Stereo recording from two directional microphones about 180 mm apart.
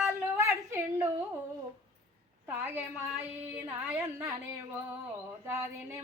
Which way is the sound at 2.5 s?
10° right (ahead or behind).